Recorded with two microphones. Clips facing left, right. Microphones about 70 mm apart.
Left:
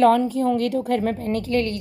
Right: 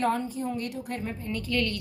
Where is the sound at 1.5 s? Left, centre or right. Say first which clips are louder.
Left 5 dB; left.